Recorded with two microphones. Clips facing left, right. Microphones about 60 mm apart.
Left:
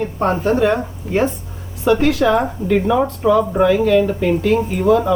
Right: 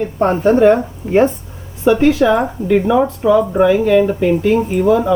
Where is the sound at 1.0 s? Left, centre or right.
Right.